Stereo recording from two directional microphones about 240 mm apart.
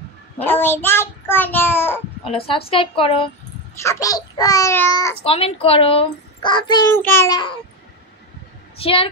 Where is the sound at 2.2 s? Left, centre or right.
Left.